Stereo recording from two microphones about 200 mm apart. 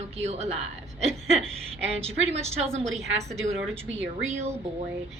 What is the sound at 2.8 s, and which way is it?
Speech, centre (ahead or behind).